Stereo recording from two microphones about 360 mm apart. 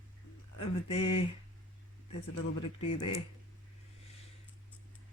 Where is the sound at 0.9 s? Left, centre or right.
Centre.